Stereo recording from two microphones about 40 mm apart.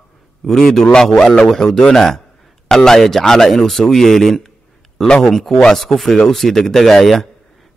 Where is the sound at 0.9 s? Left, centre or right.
Centre.